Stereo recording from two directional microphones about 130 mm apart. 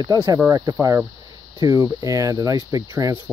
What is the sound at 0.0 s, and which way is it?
Speech, 30° right (ahead or behind).